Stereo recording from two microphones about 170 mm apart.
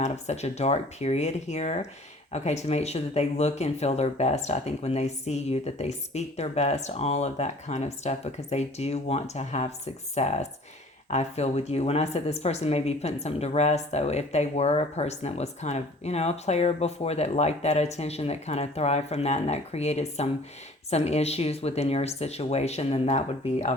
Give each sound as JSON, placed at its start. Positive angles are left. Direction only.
{"t": 0.0, "sound": "speech", "side_deg": 40}